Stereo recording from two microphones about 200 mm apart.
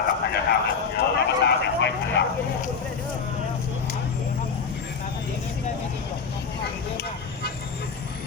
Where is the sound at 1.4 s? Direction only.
60° left (ahead or behind).